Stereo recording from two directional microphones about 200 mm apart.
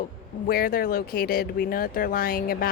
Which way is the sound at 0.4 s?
45° left (ahead or behind).